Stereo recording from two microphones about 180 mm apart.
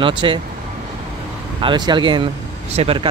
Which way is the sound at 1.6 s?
25° right (ahead or behind).